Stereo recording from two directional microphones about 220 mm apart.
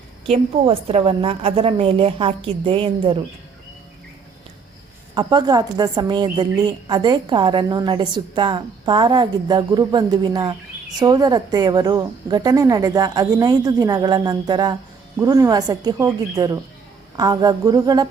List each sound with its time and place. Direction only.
0.3 s a woman's voice: 25° right (ahead or behind)
5.1 s a woman's voice: 20° right (ahead or behind)